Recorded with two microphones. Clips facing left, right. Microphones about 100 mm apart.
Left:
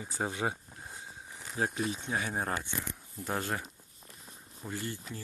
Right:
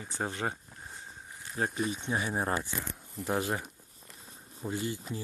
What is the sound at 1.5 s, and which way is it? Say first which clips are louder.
Speech: right 1 dB; centre (ahead or behind).